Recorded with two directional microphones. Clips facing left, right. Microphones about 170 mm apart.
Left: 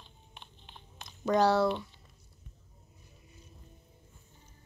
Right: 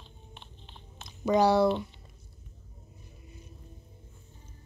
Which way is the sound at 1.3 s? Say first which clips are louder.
Right 3 dB; 10° right (ahead or behind).